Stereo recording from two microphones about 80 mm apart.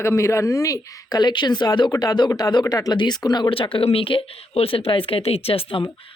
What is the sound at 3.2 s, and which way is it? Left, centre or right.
Speech, left.